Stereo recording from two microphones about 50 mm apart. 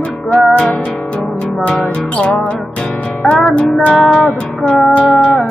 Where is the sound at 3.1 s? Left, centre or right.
Centre.